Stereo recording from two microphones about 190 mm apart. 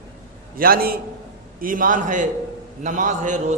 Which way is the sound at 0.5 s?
50° right (ahead or behind).